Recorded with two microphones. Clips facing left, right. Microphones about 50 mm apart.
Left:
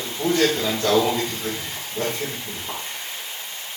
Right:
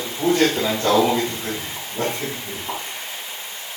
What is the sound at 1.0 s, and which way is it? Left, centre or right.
Speech, centre.